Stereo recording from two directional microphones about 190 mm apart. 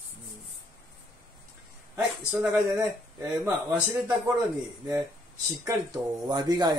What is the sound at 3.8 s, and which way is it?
Speech, 15° right (ahead or behind).